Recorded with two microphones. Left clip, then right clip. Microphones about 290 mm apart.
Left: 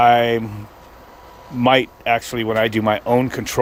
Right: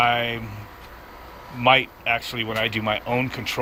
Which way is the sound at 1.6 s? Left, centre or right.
Left.